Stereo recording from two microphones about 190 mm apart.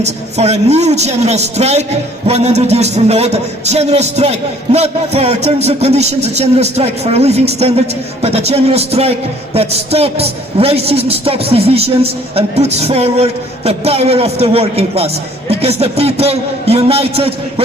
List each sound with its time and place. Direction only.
0.0 s a man's voice: 35° right (ahead or behind)